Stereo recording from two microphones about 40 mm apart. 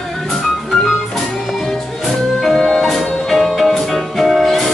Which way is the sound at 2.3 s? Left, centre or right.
Centre.